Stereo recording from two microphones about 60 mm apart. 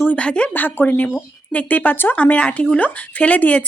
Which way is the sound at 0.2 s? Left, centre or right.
Left.